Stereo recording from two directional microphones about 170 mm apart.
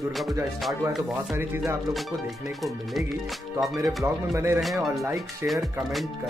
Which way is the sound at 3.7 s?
20° right (ahead or behind).